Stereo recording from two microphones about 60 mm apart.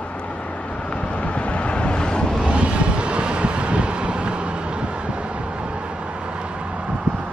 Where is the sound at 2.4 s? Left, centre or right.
Centre.